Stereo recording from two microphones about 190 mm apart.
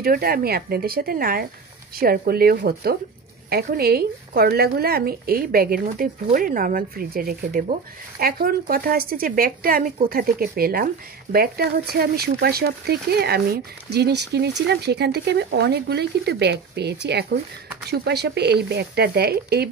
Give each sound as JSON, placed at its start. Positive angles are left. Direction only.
{"t": 0.0, "sound": "a woman's voice", "side_deg": -50}